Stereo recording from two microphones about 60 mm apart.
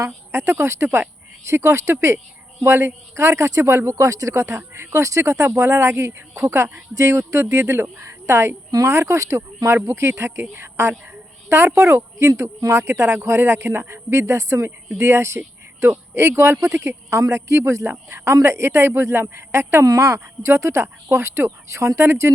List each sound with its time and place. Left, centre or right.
0.0 s a woman's voice: right
9.6 s a woman's voice: right
19.8 s speech: right
20.1 s speech: right